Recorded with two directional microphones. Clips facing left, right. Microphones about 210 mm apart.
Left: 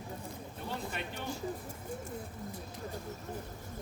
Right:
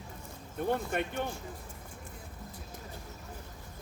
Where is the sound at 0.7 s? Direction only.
55° right (ahead or behind).